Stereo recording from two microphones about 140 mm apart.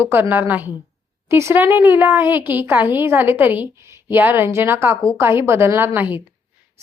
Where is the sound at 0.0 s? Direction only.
15° right (ahead or behind).